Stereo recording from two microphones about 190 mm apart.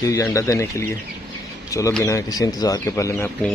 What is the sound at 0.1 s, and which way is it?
Speech, 15° left (ahead or behind).